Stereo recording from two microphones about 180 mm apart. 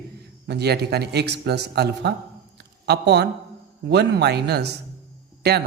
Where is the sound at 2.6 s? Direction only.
65° right (ahead or behind).